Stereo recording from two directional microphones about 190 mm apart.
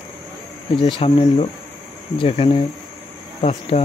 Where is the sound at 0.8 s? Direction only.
30° left (ahead or behind).